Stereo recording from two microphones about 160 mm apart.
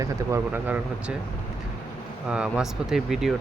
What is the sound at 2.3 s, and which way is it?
Speech, 5° right (ahead or behind).